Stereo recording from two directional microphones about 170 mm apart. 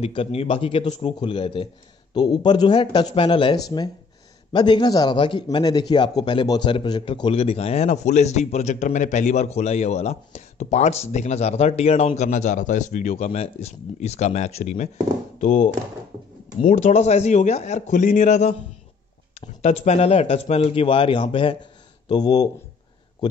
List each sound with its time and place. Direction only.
0.0 s a man's voice: 35° left (ahead or behind)